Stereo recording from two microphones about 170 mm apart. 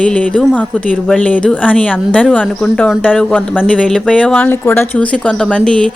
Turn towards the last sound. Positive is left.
turn(degrees=5)  # may be behind; listen again after turning